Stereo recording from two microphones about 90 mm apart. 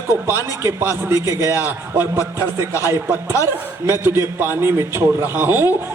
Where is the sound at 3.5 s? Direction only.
30° right (ahead or behind).